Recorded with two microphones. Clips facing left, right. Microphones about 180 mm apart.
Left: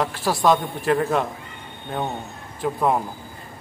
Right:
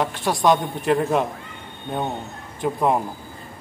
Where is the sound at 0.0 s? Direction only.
Centre (ahead or behind).